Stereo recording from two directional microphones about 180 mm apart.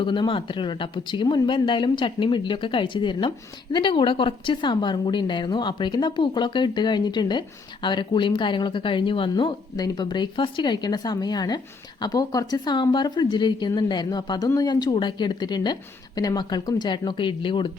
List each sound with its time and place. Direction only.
0.0 s speech: 25° left (ahead or behind)